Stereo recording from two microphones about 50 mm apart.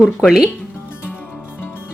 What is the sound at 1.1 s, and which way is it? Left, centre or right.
Music, left.